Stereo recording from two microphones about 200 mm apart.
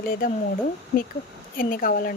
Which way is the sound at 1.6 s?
45° left (ahead or behind).